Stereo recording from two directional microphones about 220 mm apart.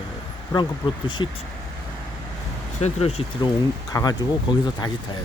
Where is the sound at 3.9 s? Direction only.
15° left (ahead or behind).